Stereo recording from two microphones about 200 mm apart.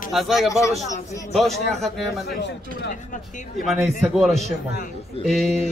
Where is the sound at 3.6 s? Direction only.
Centre (ahead or behind).